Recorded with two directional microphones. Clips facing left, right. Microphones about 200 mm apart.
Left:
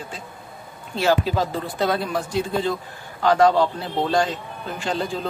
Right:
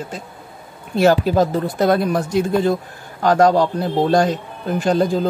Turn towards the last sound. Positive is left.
turn(degrees=-40)  # may be behind; listen again after turning